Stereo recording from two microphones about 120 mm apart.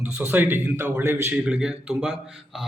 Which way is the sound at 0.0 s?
15° right (ahead or behind).